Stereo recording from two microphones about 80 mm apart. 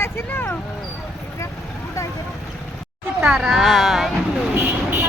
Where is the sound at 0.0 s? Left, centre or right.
Left.